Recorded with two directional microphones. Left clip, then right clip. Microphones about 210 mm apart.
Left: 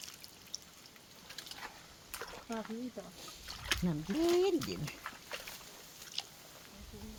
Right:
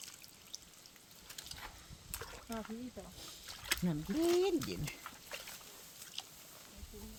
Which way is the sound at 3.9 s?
25° right (ahead or behind).